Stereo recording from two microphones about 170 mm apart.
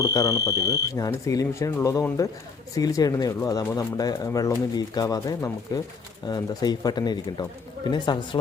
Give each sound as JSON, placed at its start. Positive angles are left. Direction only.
{"t": 0.0, "sound": "speech", "side_deg": 20}